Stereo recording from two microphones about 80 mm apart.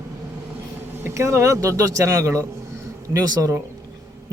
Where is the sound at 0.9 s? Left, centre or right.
Right.